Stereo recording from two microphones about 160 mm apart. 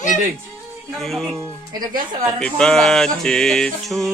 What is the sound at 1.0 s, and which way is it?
Music, centre (ahead or behind).